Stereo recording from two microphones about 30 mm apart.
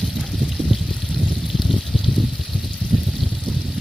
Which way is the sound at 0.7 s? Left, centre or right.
Centre.